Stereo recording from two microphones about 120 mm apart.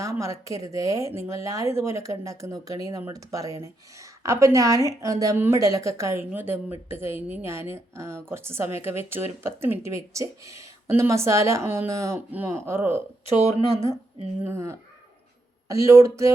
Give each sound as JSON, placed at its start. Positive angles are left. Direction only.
{"t": 0.0, "sound": "a woman's voice", "side_deg": -25}
{"t": 14.4, "sound": "a woman's voice", "side_deg": -25}